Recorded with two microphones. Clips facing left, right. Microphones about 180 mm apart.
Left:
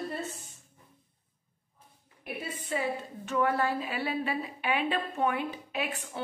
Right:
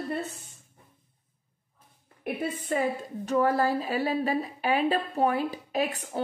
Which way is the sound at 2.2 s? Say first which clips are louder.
Right 6 dB; 55° right (ahead or behind).